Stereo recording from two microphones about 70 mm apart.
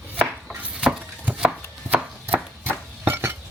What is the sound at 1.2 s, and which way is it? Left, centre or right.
Chopping, centre.